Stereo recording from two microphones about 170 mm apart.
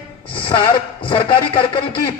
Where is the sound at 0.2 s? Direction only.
30° left (ahead or behind).